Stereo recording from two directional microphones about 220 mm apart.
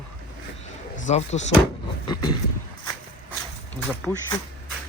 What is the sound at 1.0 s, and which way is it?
Speech, 30° left (ahead or behind).